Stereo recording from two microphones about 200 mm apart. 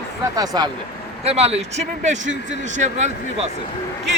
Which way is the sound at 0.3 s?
20° right (ahead or behind).